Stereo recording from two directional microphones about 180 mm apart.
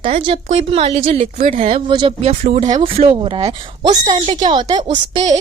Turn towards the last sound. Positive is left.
turn(degrees=-25)  # may be behind; listen again after turning